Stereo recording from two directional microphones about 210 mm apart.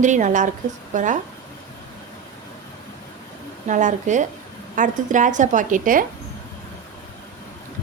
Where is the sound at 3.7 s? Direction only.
35° right (ahead or behind).